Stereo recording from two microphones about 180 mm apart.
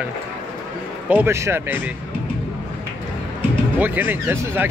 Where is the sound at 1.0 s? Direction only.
10° right (ahead or behind).